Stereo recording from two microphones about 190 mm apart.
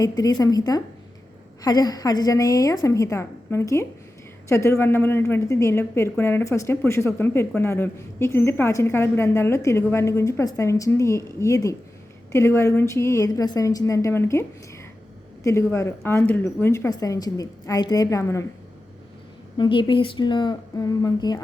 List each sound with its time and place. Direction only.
0.0 s a woman's voice: 20° left (ahead or behind)
15.4 s a woman's voice: 15° left (ahead or behind)
19.5 s speech: 25° left (ahead or behind)